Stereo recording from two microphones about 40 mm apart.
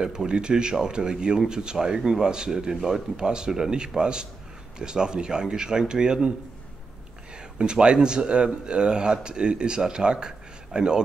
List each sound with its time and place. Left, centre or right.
0.0 s speech: centre
7.5 s speech: right